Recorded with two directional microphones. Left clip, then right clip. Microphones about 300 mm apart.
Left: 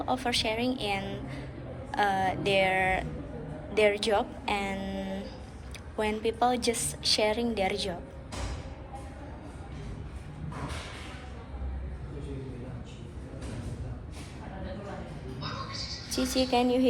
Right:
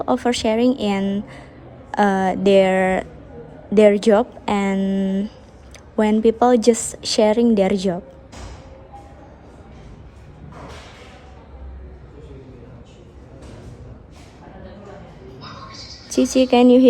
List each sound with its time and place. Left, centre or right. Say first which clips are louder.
0.0 s a woman's voice: right 9 dB; right
16.0 s a woman's voice: right 12 dB; right